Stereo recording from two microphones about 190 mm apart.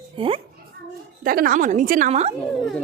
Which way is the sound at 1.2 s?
50° right (ahead or behind).